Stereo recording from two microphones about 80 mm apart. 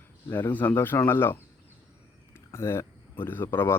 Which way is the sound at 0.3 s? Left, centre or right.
Left.